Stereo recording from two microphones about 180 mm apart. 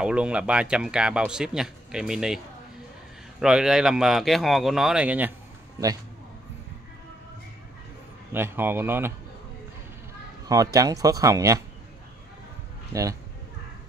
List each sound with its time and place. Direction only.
0.0 s speech: 5° right (ahead or behind)
8.3 s speech: 10° right (ahead or behind)
10.5 s speech: 20° right (ahead or behind)